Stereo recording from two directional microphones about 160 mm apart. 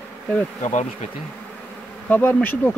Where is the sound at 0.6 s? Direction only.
50° left (ahead or behind).